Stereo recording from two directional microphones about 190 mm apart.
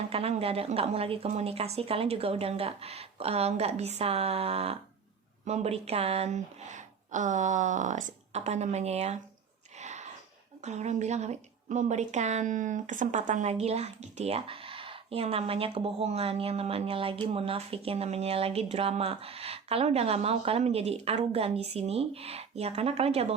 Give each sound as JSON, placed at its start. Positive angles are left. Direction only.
{"t": 0.1, "sound": "a woman's voice", "side_deg": -30}
{"t": 9.7, "sound": "a sound", "side_deg": -35}
{"t": 10.6, "sound": "a woman's voice", "side_deg": -35}